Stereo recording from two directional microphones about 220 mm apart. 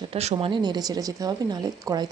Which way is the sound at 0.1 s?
30° right (ahead or behind).